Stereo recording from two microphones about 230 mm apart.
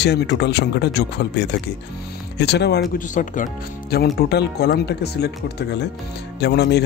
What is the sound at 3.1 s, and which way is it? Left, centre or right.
Speech, left.